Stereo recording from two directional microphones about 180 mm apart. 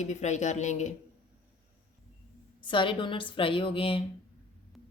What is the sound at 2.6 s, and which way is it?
A woman's voice, 25° left (ahead or behind).